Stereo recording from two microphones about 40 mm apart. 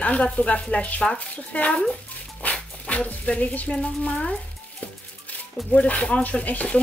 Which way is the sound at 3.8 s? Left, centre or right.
Left.